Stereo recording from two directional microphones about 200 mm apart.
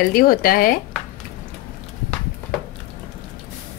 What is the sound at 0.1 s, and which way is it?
Speech, 45° left (ahead or behind).